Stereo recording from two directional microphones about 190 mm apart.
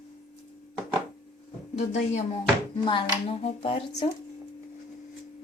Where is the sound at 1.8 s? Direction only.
40° left (ahead or behind).